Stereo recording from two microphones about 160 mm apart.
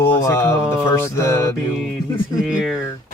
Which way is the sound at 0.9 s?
15° left (ahead or behind).